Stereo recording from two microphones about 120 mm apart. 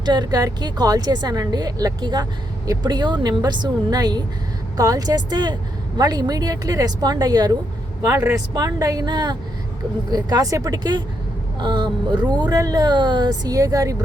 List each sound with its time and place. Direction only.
0.0 s speech: 35° right (ahead or behind)